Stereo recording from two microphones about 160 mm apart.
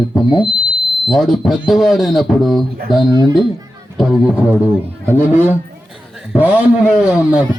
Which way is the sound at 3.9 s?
5° right (ahead or behind).